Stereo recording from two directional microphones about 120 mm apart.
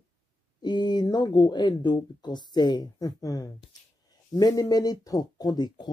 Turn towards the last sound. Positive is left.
turn(degrees=35)  # may be behind; listen again after turning